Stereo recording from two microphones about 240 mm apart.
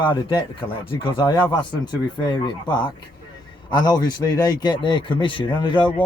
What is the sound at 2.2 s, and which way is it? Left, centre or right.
A man's voice, centre.